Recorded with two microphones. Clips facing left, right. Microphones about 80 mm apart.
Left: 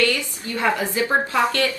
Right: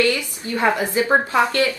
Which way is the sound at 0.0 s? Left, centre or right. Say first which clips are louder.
Right 2 dB; right.